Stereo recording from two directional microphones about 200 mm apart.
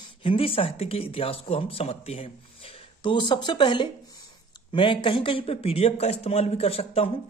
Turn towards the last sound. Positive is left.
turn(degrees=30)  # may be behind; listen again after turning